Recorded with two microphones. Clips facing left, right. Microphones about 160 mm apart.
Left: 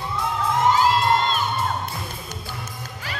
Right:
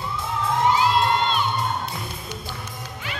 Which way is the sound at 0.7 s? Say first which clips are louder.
Left 1 dB; 45° left (ahead or behind).